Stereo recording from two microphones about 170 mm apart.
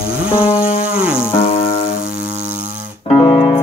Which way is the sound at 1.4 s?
35° left (ahead or behind).